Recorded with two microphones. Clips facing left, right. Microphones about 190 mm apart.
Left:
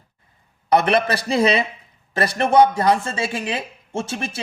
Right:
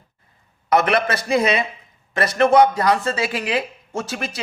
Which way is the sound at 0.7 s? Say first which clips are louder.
Left 1 dB; 30° left (ahead or behind).